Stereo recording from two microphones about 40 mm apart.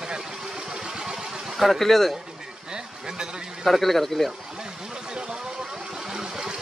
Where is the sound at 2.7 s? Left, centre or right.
Centre.